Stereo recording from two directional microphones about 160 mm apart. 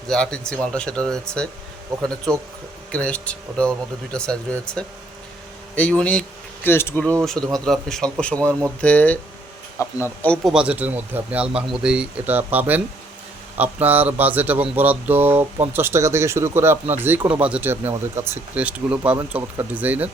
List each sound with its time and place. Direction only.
0.1 s speech: 5° left (ahead or behind)
2.9 s speech: 10° left (ahead or behind)
7.5 s speech: centre (ahead or behind)
10.3 s speech: centre (ahead or behind)